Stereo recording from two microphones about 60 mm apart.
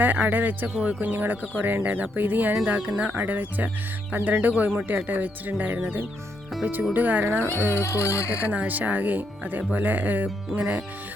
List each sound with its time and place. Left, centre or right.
0.0 s music: right
0.7 s speech: centre
1.0 s speech: right
1.5 s music: right
2.6 s speech: right
3.1 s music: right
5.0 s speech: right
7.3 s speech: right
7.9 s speech: left
8.4 s speech: right
9.7 s music: right
10.5 s speech: centre